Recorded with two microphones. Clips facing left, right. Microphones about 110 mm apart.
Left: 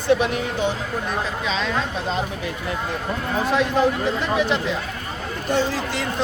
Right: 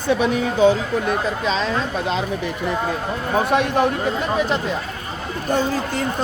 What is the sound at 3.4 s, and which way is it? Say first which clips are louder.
Speech: right 2 dB; 60° right (ahead or behind).